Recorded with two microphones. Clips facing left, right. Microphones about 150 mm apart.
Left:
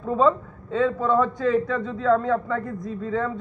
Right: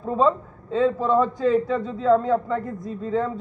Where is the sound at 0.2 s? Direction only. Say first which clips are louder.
Even; 35° right (ahead or behind).